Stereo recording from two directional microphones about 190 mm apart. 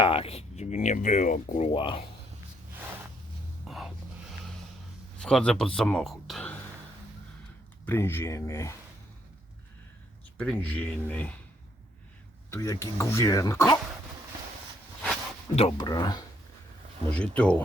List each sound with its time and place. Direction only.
0.0 s speech: 30° left (ahead or behind)
1.7 s speech: 30° left (ahead or behind)
3.7 s music: centre (ahead or behind)
5.2 s a man's voice: 5° left (ahead or behind)
7.9 s speech: 10° left (ahead or behind)
10.3 s speech: 5° left (ahead or behind)
12.5 s speech: 15° left (ahead or behind)
15.5 s speech: 25° left (ahead or behind)
17.1 s speech: 5° left (ahead or behind)